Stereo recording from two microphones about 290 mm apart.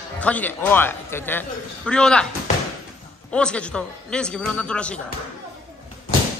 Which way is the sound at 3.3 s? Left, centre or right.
Centre.